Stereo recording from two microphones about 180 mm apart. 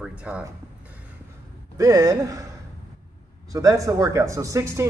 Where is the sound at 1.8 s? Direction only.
20° right (ahead or behind).